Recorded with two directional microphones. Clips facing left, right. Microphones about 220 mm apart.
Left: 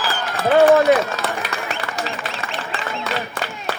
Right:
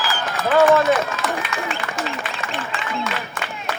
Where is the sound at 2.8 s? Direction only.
35° left (ahead or behind).